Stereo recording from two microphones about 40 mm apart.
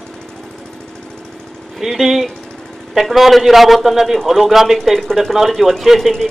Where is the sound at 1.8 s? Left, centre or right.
Centre.